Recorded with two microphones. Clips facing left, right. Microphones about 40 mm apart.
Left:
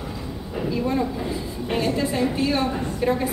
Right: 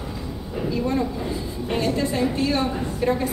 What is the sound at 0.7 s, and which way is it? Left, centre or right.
A woman's voice, centre.